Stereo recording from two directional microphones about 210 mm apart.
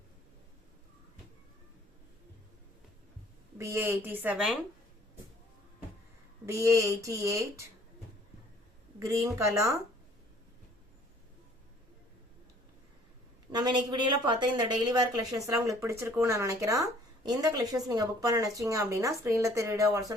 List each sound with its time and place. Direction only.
3.6 s a woman's voice: 10° right (ahead or behind)
6.4 s a woman's voice: 15° right (ahead or behind)
9.0 s a woman's voice: 15° right (ahead or behind)
13.5 s a woman's voice: 20° right (ahead or behind)